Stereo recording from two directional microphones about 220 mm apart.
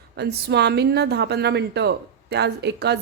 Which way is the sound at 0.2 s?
50° right (ahead or behind).